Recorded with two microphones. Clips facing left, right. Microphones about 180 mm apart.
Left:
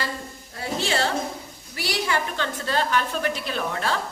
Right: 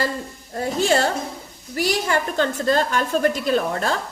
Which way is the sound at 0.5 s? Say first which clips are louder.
Right 7 dB; 45° right (ahead or behind).